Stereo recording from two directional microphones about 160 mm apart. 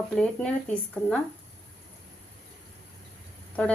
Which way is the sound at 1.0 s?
10° left (ahead or behind).